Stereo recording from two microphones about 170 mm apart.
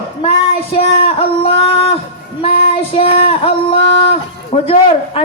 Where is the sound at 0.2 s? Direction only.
35° left (ahead or behind).